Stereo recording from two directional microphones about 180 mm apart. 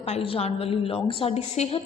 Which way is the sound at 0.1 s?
35° left (ahead or behind).